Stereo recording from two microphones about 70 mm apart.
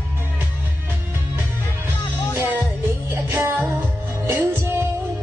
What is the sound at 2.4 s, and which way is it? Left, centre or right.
Music, right.